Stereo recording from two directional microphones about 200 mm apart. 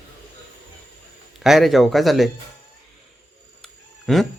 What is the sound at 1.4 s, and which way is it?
Speech, centre (ahead or behind).